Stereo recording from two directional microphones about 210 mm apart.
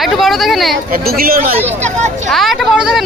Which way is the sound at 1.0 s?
45° right (ahead or behind).